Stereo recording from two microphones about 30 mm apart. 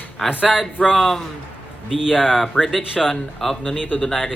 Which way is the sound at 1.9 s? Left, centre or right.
Centre.